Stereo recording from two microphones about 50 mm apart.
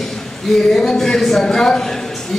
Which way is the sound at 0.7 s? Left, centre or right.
Centre.